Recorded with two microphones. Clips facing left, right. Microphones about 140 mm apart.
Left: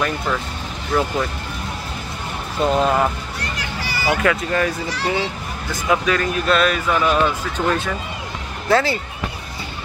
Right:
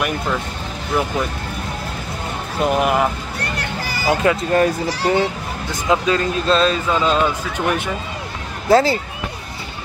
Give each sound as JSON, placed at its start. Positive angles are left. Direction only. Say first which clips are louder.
{"t": 0.9, "sound": "speech", "louder": "left 1 dB", "side_deg": -10}
{"t": 2.6, "sound": "speech", "louder": "even", "side_deg": -15}
{"t": 3.3, "sound": "music", "louder": "right 3 dB", "side_deg": -60}
{"t": 4.1, "sound": "speech", "louder": "right 3 dB", "side_deg": -25}
{"t": 5.9, "sound": "speech", "louder": "right 1 dB", "side_deg": -25}
{"t": 8.6, "sound": "speech", "louder": "right 4 dB", "side_deg": -35}